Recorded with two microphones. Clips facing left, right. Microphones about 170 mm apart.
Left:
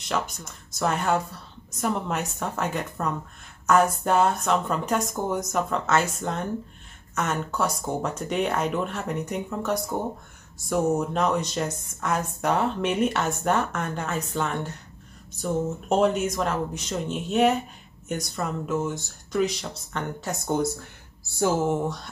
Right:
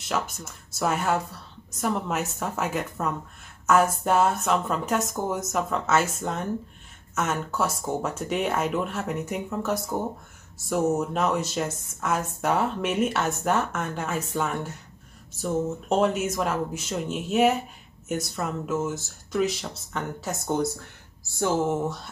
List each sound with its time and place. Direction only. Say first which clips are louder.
0.0 s speech: even; 5° right (ahead or behind)